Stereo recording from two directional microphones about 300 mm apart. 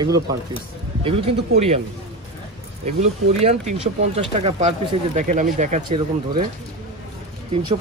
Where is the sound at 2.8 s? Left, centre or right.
Right.